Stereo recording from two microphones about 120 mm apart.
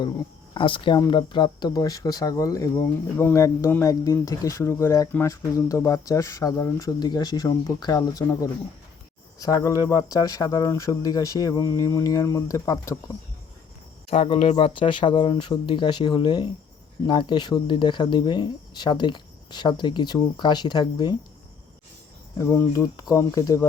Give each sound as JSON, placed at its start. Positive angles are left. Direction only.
{"t": 0.5, "sound": "speech", "side_deg": 45}
{"t": 14.1, "sound": "speech", "side_deg": 55}
{"t": 22.4, "sound": "speech", "side_deg": 25}